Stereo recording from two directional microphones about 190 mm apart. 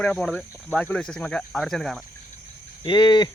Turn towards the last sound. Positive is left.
turn(degrees=25)  # may be behind; listen again after turning